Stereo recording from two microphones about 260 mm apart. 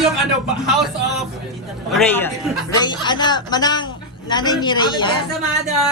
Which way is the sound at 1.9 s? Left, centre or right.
Centre.